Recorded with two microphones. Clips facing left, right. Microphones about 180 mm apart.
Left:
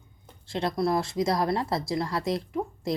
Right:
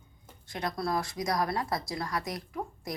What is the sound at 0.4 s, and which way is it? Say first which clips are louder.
A woman's voice: left 6 dB; 25° left (ahead or behind).